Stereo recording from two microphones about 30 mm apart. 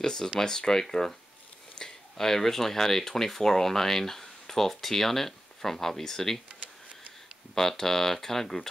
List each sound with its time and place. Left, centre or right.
0.0 s speech: left
7.5 s speech: centre